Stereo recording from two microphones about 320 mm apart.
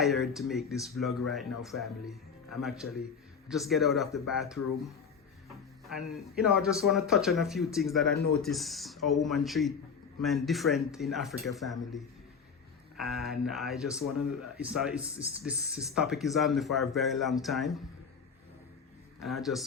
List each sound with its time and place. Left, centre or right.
0.0 s speech: centre
6.0 s speech: centre
13.0 s speech: centre
14.0 s speech: left
14.6 s speech: centre
19.2 s speech: centre